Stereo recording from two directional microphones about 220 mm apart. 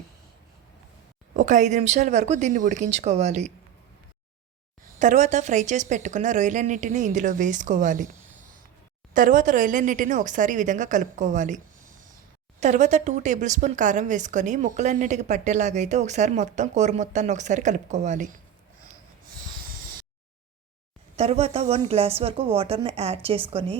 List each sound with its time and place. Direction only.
1.3 s speech: 35° right (ahead or behind)
4.9 s speech: 35° right (ahead or behind)
9.1 s speech: 35° right (ahead or behind)
21.2 s speech: 30° right (ahead or behind)